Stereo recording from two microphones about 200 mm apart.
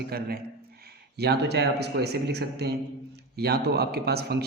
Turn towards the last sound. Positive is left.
turn(degrees=-55)  # may be behind; listen again after turning